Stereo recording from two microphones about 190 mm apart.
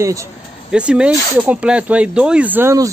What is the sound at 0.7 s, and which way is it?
Speech, 5° right (ahead or behind).